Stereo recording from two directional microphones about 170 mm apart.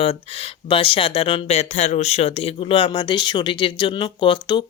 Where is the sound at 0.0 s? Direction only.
35° left (ahead or behind).